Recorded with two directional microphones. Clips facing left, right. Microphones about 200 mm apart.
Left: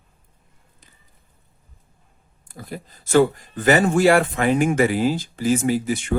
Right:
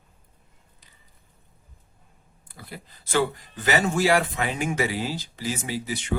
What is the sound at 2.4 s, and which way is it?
Speech, 45° left (ahead or behind).